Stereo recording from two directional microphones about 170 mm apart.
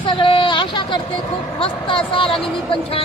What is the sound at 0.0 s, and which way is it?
Speech, 30° left (ahead or behind).